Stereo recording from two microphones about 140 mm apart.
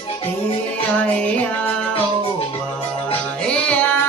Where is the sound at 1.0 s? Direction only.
10° left (ahead or behind).